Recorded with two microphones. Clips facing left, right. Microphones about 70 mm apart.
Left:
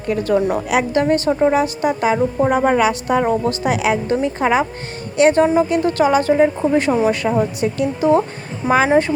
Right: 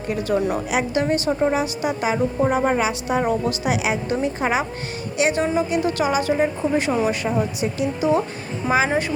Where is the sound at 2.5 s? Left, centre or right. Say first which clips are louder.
Left 5 dB; left.